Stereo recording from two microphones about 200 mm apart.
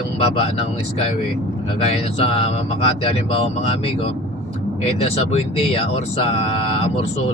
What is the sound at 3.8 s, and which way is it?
Speech, 30° left (ahead or behind).